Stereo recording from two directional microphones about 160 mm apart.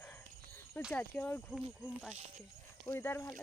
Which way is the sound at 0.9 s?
10° left (ahead or behind).